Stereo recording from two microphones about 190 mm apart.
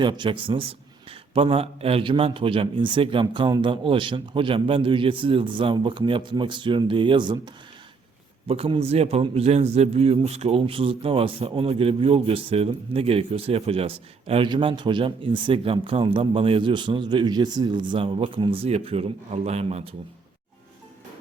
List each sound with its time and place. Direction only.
0.0 s a man's voice: 25° right (ahead or behind)